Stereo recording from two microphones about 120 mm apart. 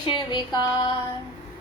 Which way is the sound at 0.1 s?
40° left (ahead or behind).